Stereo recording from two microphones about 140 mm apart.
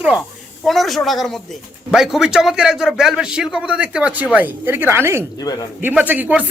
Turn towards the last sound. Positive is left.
turn(degrees=-10)  # may be behind; listen again after turning